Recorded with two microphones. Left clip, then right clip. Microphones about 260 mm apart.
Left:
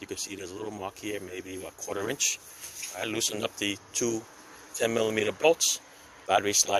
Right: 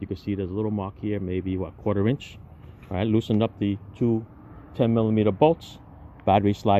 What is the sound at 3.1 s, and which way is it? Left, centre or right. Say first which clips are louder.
Speech: right 7 dB; centre.